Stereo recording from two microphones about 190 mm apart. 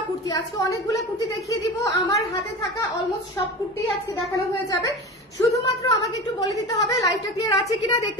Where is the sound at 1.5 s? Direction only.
15° left (ahead or behind).